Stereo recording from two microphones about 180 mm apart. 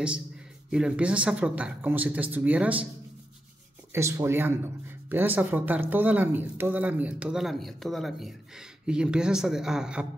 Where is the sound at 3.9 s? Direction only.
15° right (ahead or behind).